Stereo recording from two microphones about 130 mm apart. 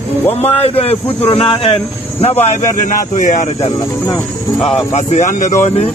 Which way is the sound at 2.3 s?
15° left (ahead or behind).